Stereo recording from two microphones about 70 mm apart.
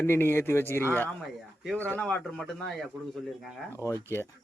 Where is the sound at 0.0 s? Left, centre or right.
Left.